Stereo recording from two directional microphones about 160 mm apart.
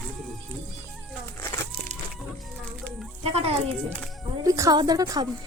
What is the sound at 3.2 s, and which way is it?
Speech, 40° right (ahead or behind).